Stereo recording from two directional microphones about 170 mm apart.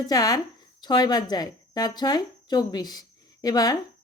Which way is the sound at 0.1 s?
20° left (ahead or behind).